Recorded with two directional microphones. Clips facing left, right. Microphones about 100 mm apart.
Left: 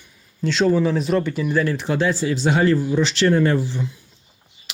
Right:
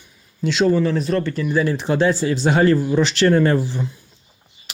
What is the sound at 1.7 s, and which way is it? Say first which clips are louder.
Speech: right 3 dB; 30° right (ahead or behind).